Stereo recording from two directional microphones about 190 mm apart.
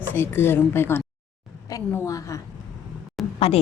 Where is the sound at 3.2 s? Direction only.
Centre (ahead or behind).